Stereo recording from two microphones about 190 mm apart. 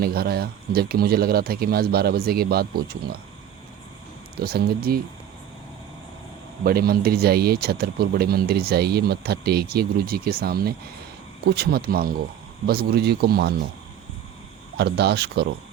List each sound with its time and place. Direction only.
0.0 s speech: 55° right (ahead or behind)
4.4 s speech: 55° right (ahead or behind)
6.7 s speech: 50° right (ahead or behind)
14.8 s speech: 60° right (ahead or behind)